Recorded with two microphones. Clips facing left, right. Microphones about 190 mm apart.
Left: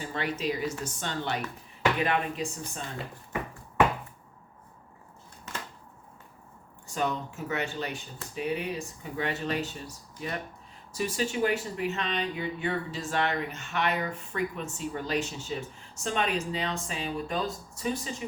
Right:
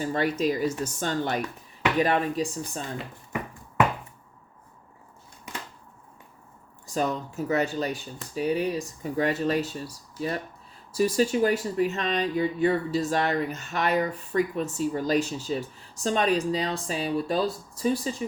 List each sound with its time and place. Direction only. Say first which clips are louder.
0.0 s speech: right 6 dB; 40° right (ahead or behind)
6.8 s speech: right 3 dB; 35° right (ahead or behind)